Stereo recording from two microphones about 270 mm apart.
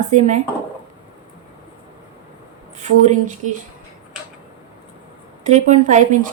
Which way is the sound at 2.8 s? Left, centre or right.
Right.